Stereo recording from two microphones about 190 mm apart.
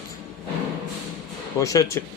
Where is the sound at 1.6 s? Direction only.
15° left (ahead or behind).